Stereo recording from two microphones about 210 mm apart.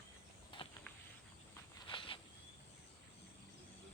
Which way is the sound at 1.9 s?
25° left (ahead or behind).